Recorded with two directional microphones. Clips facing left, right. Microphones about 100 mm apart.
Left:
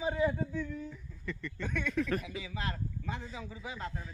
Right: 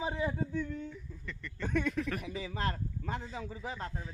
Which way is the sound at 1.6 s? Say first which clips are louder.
Right 5 dB; 35° right (ahead or behind).